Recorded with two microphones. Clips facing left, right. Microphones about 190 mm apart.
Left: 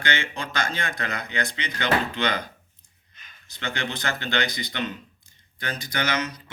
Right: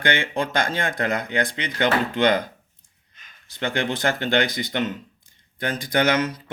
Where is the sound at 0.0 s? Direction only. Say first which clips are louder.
Right 6 dB; 55° right (ahead or behind).